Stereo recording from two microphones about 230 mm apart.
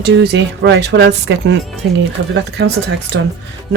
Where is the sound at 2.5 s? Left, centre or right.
Right.